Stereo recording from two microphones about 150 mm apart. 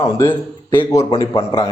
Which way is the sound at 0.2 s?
15° left (ahead or behind).